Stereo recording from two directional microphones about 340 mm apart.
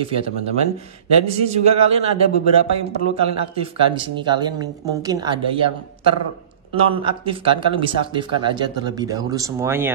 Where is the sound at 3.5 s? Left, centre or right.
Centre.